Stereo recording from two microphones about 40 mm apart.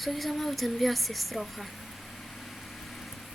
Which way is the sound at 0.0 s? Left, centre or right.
Centre.